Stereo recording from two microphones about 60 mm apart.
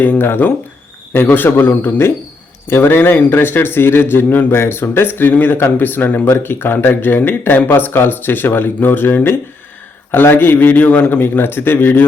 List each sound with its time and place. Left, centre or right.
0.0 s speech: left
6.2 s speech: left